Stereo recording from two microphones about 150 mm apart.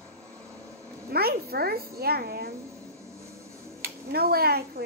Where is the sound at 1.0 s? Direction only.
90° right.